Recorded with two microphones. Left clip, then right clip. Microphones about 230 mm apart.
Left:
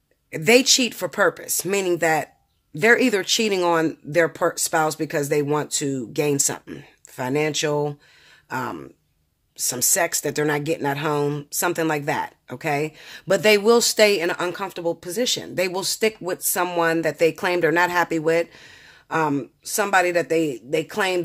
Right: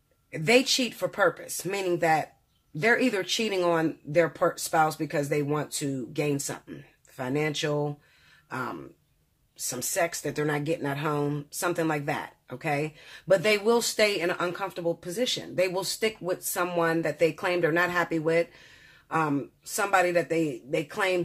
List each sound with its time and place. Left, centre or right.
0.3 s speech: left
8.5 s throat clearing: left
9.7 s speech: left